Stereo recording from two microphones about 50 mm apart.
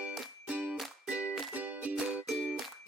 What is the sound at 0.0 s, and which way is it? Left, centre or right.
Music, right.